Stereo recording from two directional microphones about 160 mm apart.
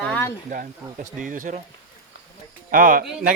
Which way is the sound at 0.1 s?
15° left (ahead or behind).